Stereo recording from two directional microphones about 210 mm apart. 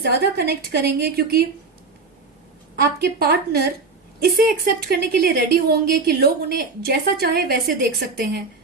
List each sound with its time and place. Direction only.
0.0 s a woman's voice: 50° right (ahead or behind)
3.0 s a woman's voice: 50° right (ahead or behind)